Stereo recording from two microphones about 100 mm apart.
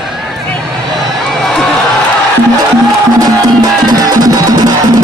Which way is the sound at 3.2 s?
40° right (ahead or behind).